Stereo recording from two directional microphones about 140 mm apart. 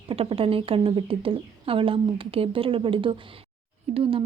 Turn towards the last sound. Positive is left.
turn(degrees=-40)  # may be behind; listen again after turning